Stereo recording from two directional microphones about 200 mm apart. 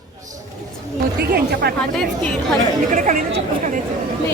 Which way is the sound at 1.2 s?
50° right (ahead or behind).